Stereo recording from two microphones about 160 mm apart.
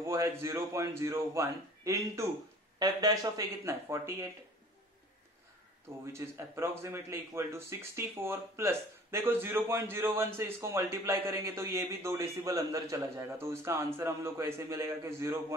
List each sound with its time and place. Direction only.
0.0 s a man's voice: 15° right (ahead or behind)
6.1 s speech: 15° right (ahead or behind)